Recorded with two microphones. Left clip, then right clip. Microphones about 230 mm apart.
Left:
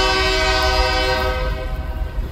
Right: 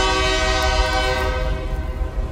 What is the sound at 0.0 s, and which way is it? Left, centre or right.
Train, left.